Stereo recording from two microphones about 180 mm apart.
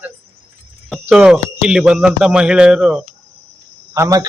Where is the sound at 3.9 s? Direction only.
20° right (ahead or behind).